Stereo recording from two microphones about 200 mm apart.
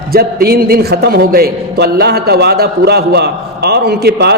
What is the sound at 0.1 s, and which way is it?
A man's voice, 50° right (ahead or behind).